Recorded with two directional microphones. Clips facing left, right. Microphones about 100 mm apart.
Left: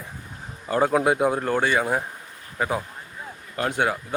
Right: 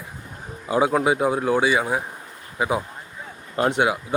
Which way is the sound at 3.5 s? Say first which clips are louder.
Right 5 dB; 25° right (ahead or behind).